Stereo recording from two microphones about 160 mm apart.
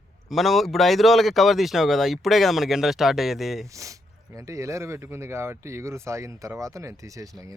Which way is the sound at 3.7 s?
20° right (ahead or behind).